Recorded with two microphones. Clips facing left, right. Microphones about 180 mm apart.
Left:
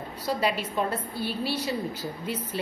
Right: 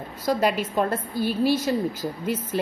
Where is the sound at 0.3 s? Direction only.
45° right (ahead or behind).